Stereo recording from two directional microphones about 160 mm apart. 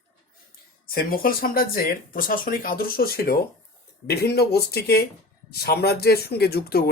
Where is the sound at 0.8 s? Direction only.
65° left (ahead or behind).